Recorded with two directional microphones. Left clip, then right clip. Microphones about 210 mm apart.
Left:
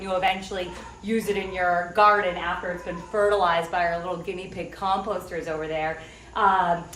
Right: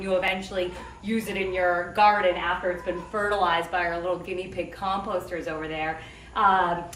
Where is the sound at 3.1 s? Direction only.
10° left (ahead or behind).